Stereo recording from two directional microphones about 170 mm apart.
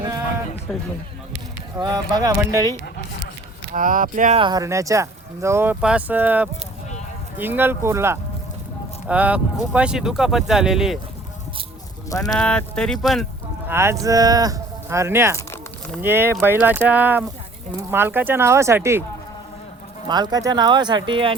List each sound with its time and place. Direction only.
0.7 s speech: centre (ahead or behind)
1.8 s speech: 20° right (ahead or behind)
3.7 s speech: 50° right (ahead or behind)
4.4 s speech: 25° right (ahead or behind); by 10.9 s 5° right (ahead or behind)
12.1 s speech: 20° left (ahead or behind)
12.4 s speech: 5° left (ahead or behind)
13.7 s speech: 15° right (ahead or behind)
20.1 s speech: 25° right (ahead or behind)